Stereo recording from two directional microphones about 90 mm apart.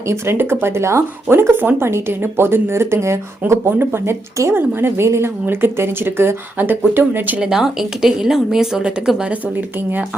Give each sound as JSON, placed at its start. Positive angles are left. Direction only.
{"t": 0.1, "sound": "speech", "side_deg": -25}
{"t": 7.3, "sound": "a woman's voice", "side_deg": -10}
{"t": 9.6, "sound": "speech", "side_deg": -20}